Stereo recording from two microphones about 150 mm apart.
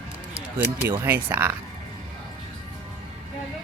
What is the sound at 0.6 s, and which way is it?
Speech, 15° right (ahead or behind).